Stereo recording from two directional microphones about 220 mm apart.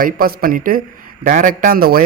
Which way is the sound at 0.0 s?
40° right (ahead or behind).